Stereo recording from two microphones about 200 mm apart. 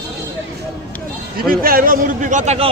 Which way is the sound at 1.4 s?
45° right (ahead or behind).